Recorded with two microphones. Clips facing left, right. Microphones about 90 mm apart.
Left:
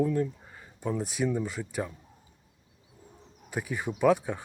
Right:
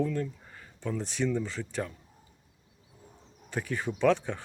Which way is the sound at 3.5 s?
10° left (ahead or behind).